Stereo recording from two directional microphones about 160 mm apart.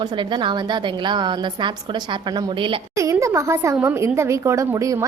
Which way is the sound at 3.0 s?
20° right (ahead or behind).